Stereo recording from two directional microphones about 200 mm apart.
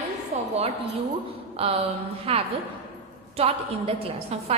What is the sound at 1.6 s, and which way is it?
A woman's voice, 30° right (ahead or behind).